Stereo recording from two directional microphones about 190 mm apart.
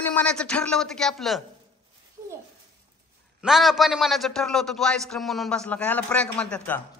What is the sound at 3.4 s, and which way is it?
A man's voice, centre (ahead or behind).